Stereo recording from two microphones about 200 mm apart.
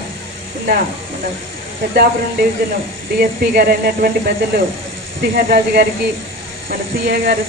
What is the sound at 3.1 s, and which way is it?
Speech, 50° right (ahead or behind).